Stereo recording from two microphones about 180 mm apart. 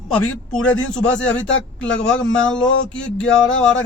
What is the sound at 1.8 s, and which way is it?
Speech, 90° left.